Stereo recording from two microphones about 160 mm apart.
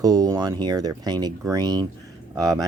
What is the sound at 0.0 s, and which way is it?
Speech, 25° right (ahead or behind).